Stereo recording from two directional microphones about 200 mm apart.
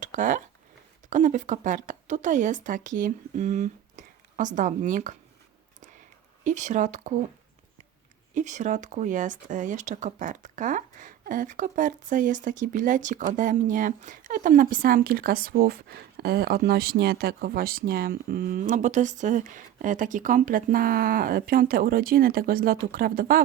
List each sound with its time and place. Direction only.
0.0 s speech: 40° right (ahead or behind)
6.4 s speech: 35° right (ahead or behind)
8.4 s speech: 35° right (ahead or behind)